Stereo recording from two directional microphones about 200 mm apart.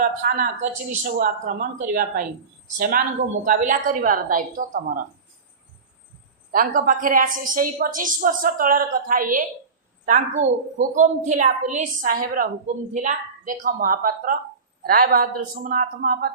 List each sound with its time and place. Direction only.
0.0 s a woman's voice: 45° right (ahead or behind)
6.5 s a woman's voice: 45° right (ahead or behind)